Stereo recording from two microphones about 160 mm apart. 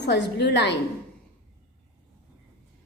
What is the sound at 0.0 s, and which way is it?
Speech, 90° left.